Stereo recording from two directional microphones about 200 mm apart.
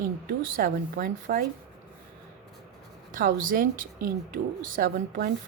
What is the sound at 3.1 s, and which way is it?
Speech, 45° right (ahead or behind).